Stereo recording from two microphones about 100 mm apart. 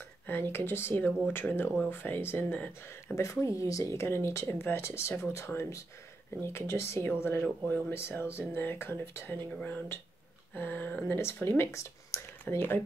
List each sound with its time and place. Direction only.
0.3 s speech: 20° left (ahead or behind)
3.2 s speech: 30° left (ahead or behind)
10.5 s speech: 20° left (ahead or behind)